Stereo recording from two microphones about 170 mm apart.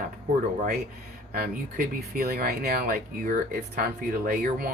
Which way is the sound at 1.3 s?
65° right (ahead or behind).